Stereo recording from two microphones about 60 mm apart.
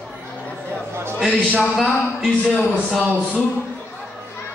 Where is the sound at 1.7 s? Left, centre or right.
Centre.